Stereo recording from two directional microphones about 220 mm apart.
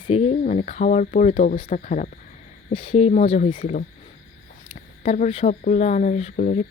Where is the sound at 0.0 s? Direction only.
30° left (ahead or behind).